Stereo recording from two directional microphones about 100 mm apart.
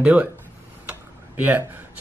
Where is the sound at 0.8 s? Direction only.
15° right (ahead or behind).